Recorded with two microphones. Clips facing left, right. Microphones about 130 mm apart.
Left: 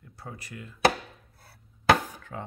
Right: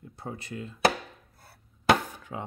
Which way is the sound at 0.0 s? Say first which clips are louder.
Right 4 dB; 25° right (ahead or behind).